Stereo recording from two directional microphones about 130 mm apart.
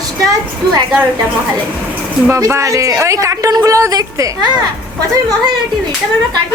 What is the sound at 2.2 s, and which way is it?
A woman's voice, 20° right (ahead or behind).